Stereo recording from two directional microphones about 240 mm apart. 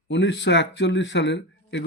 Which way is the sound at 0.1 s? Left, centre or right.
Left.